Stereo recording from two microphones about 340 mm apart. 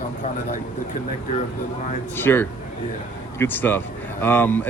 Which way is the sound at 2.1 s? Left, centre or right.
Centre.